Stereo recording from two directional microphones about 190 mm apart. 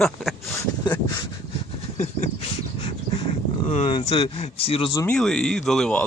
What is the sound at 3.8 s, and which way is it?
Speech, 30° left (ahead or behind).